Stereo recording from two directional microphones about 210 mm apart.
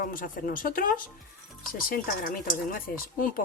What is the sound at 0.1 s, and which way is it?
Speech, 40° left (ahead or behind).